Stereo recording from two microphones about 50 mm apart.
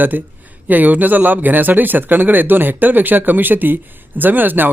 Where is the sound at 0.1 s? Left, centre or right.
Right.